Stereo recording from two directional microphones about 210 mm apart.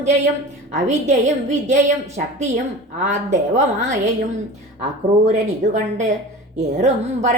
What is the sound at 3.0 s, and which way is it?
Speech, 35° right (ahead or behind).